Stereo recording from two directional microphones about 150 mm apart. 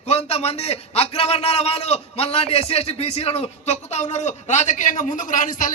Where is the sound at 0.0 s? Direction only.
45° left (ahead or behind).